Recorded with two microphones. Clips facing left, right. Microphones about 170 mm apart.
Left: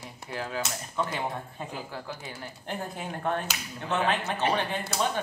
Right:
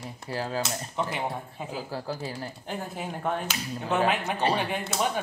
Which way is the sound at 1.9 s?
35° right (ahead or behind).